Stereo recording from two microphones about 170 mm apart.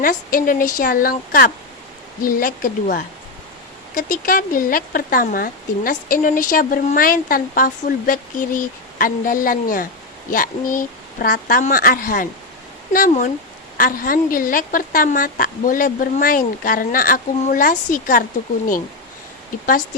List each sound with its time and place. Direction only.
0.0 s speech: 55° left (ahead or behind)